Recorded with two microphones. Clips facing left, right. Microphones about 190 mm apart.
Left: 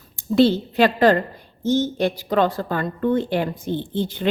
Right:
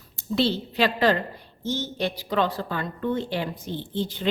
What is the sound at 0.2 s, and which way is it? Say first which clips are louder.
A woman's voice: left 8 dB; 50° left (ahead or behind).